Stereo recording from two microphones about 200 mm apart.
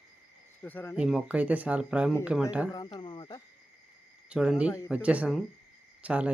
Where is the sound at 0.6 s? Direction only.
10° left (ahead or behind).